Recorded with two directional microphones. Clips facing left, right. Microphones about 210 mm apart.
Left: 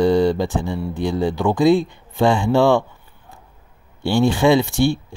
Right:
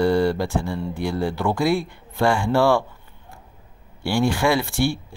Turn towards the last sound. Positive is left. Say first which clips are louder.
# left 5 dB
turn(degrees=20)  # may be behind; listen again after turning